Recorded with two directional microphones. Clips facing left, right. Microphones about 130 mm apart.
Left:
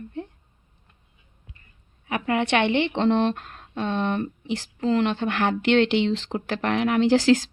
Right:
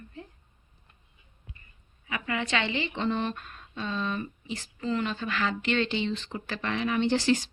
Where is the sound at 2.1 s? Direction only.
65° left (ahead or behind).